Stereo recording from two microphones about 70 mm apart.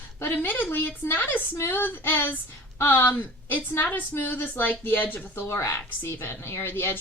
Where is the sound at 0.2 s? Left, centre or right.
Left.